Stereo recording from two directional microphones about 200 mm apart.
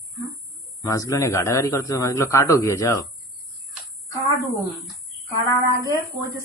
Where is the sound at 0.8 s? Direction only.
15° left (ahead or behind).